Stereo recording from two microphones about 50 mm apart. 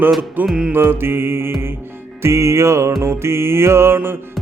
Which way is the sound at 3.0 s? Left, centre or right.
Right.